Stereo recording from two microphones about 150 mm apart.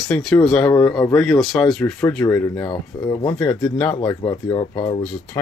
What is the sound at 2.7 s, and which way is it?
Speech, 25° left (ahead or behind).